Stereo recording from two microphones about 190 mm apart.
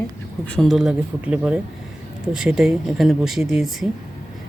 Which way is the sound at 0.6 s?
Centre (ahead or behind).